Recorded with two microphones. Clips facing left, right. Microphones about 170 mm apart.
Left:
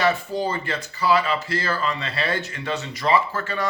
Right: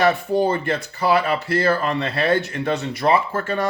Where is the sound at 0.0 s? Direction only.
60° right (ahead or behind).